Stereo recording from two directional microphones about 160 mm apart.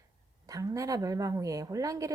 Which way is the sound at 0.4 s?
20° right (ahead or behind).